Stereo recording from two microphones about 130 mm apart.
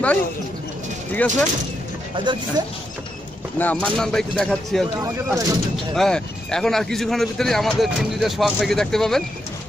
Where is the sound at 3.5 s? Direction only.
10° left (ahead or behind).